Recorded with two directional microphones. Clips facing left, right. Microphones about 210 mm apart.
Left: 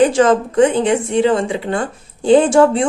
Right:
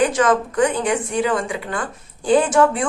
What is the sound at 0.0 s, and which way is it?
A woman's voice, 30° left (ahead or behind).